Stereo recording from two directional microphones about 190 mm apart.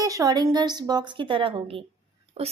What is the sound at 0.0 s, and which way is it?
A woman's voice, 20° right (ahead or behind).